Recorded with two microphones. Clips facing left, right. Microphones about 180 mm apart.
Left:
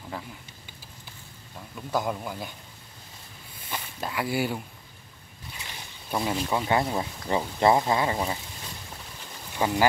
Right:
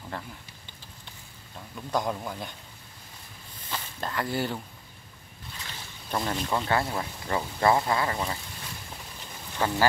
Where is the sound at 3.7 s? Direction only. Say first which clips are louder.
Left 1 dB; 10° left (ahead or behind).